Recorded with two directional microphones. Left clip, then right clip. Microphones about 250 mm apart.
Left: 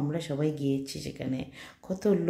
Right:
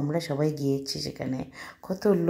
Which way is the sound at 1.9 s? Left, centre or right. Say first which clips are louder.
Right 3 dB; centre.